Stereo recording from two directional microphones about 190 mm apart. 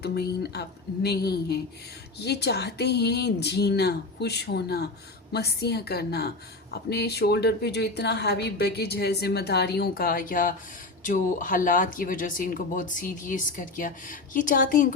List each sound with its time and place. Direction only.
0.0 s a woman's voice: 60° left (ahead or behind)